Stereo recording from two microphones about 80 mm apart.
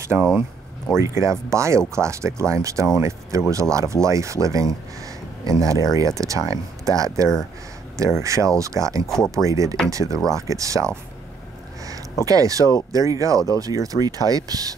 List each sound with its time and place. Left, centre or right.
0.0 s speech: right
9.0 s speech: centre
9.3 s speech: right
12.3 s speech: right